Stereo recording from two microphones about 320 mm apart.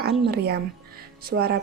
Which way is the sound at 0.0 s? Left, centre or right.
Right.